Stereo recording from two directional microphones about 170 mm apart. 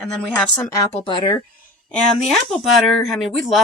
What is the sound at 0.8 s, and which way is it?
Speech, 30° left (ahead or behind).